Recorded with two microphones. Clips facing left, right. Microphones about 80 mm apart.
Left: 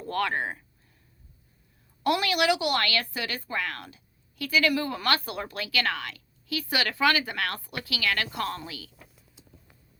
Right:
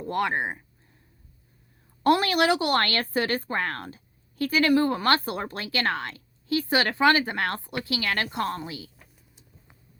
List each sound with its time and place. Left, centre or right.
0.0 s speech: centre
2.0 s speech: right